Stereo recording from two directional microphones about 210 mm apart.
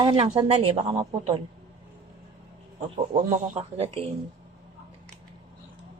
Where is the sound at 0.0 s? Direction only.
25° right (ahead or behind).